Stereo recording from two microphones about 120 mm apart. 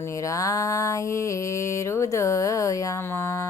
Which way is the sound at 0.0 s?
25° left (ahead or behind).